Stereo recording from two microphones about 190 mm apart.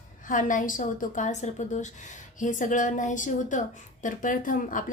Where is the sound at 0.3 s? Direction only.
45° left (ahead or behind).